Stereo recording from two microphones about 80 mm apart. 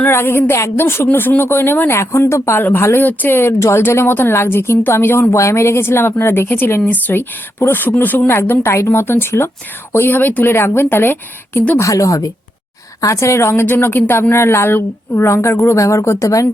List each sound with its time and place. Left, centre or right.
0.0 s a woman's voice: left
11.8 s a woman's voice: left